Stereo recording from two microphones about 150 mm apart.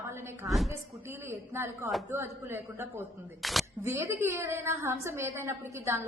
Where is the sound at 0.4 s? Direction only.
Centre (ahead or behind).